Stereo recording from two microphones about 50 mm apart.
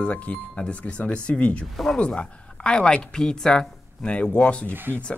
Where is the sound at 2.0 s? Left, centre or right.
Left.